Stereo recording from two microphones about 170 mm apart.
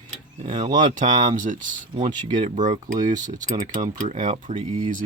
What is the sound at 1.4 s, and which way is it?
Speech, 50° right (ahead or behind).